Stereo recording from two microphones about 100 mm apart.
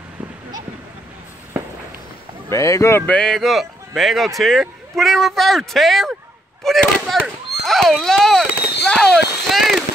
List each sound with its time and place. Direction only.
2.5 s speech: 30° left (ahead or behind)
3.1 s speech: 10° left (ahead or behind)